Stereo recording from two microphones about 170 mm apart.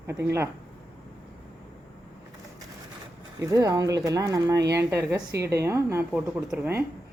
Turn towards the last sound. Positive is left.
turn(degrees=-10)  # may be behind; listen again after turning